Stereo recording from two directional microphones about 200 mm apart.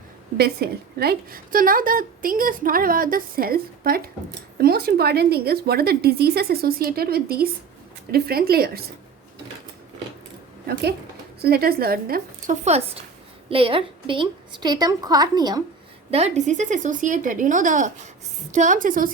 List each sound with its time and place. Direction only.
0.3 s a woman's voice: 50° right (ahead or behind)
10.7 s a woman's voice: 55° right (ahead or behind)
12.6 s a woman's voice: 30° right (ahead or behind)
16.1 s a woman's voice: 35° right (ahead or behind)